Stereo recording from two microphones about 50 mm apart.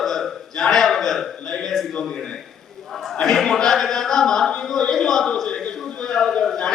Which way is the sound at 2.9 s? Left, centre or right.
Centre.